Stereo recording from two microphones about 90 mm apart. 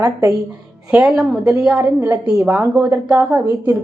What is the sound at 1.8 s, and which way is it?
A woman's voice, 35° right (ahead or behind).